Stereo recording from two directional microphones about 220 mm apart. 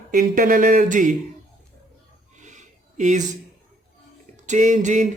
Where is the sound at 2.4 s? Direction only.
35° right (ahead or behind).